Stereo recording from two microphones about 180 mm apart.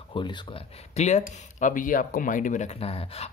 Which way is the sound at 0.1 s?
30° left (ahead or behind).